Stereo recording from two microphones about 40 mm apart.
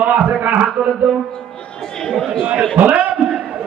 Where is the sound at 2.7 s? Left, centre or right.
Right.